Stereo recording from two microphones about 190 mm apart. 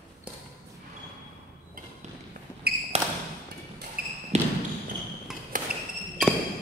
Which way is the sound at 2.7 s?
55° right (ahead or behind).